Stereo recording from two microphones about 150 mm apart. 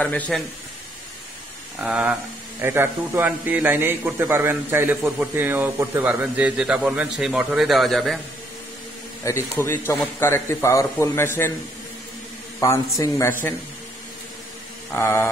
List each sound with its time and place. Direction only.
0.0 s a man's voice: 10° left (ahead or behind)
1.8 s a man's voice: 10° right (ahead or behind)
9.2 s a man's voice: 20° left (ahead or behind)
12.5 s a man's voice: 20° left (ahead or behind)
15.0 s a man's voice: 15° left (ahead or behind)